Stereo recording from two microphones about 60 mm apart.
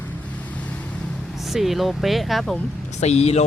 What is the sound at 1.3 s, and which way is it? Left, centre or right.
Speech, centre.